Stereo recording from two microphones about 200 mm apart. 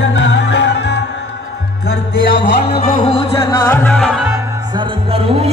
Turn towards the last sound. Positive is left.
turn(degrees=0)  # may be behind; listen again after turning